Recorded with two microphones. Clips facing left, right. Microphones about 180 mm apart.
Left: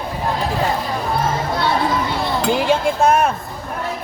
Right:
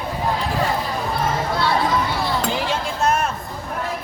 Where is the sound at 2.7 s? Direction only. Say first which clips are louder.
Left 8 dB; 55° left (ahead or behind).